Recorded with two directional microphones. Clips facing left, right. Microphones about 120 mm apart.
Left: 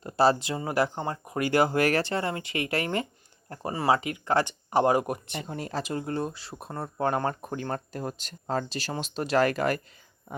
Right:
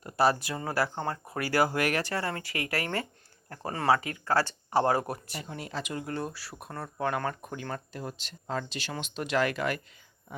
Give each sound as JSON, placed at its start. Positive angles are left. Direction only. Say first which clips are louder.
{"t": 0.0, "sound": "speech", "louder": "left 3 dB", "side_deg": 25}
{"t": 5.5, "sound": "speech", "louder": "left 4 dB", "side_deg": 40}
{"t": 10.3, "sound": "a sound", "louder": "left 4 dB", "side_deg": 50}